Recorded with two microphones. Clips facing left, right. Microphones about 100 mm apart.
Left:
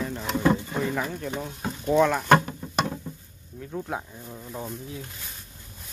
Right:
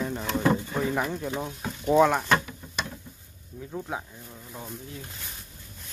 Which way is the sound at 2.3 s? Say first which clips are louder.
Left 6 dB; 45° left (ahead or behind).